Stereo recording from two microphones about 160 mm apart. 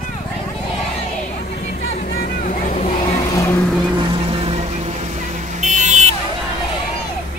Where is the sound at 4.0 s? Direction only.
35° right (ahead or behind).